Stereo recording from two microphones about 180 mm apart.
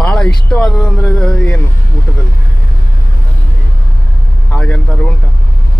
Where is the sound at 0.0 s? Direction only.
5° left (ahead or behind).